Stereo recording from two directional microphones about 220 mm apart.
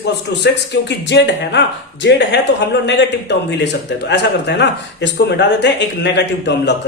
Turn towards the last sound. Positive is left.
turn(degrees=50)  # may be behind; listen again after turning